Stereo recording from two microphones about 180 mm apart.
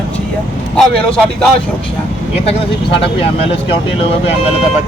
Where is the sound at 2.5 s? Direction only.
30° left (ahead or behind).